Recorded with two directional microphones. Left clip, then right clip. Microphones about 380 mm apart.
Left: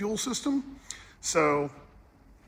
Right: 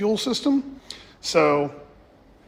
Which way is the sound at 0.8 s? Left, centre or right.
Right.